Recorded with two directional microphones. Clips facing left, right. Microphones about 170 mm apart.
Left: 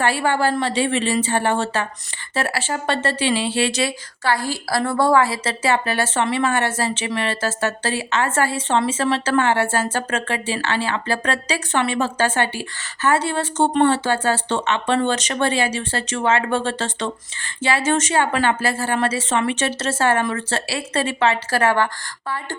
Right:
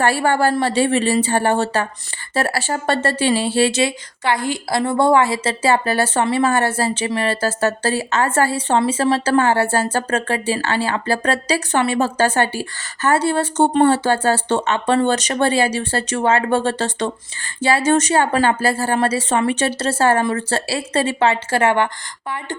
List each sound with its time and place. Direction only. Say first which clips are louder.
0.0 s a woman's voice: right 3 dB; 45° right (ahead or behind)
3.7 s a woman's voice: right 3 dB; 25° right (ahead or behind)